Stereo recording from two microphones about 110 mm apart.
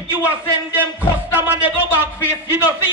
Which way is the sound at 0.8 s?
15° right (ahead or behind).